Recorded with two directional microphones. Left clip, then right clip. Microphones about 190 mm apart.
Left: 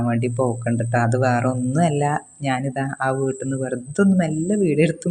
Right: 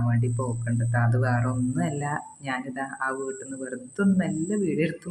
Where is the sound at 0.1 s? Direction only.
35° left (ahead or behind).